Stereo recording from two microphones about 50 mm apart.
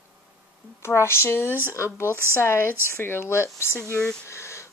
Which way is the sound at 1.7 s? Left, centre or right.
Left.